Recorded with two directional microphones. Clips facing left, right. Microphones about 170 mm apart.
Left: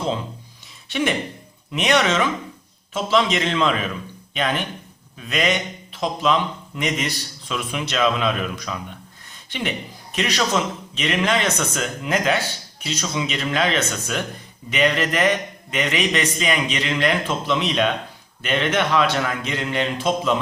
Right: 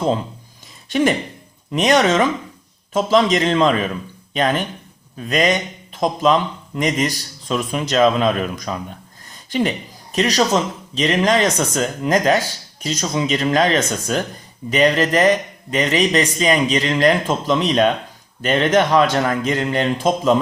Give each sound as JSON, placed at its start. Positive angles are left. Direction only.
{"t": 0.9, "sound": "a man's voice", "side_deg": -40}